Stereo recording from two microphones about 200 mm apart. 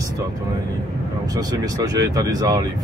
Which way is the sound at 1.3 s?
20° right (ahead or behind).